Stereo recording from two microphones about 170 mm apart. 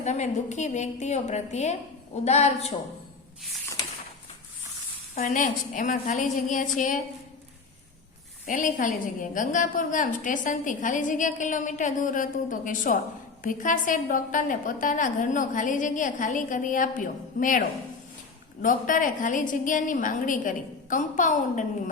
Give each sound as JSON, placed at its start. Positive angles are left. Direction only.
{"t": 0.0, "sound": "a woman's voice", "side_deg": 45}
{"t": 5.1, "sound": "a woman's voice", "side_deg": 50}
{"t": 8.4, "sound": "a woman's voice", "side_deg": 50}
{"t": 18.6, "sound": "a woman's voice", "side_deg": 50}